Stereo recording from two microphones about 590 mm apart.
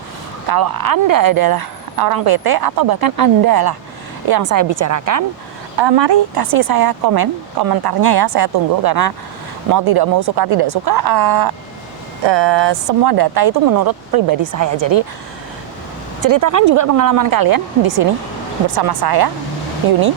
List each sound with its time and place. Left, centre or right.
0.4 s speech: right
5.7 s speech: right
16.2 s speech: right